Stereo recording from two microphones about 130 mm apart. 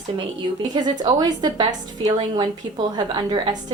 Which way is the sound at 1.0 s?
30° right (ahead or behind).